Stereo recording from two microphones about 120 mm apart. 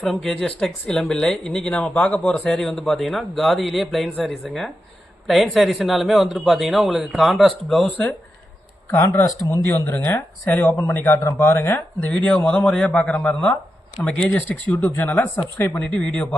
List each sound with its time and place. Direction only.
0.0 s speech: centre (ahead or behind)
8.9 s speech: 20° left (ahead or behind)